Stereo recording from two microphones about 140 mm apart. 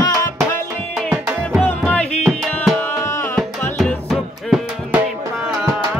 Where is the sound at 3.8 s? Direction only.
Centre (ahead or behind).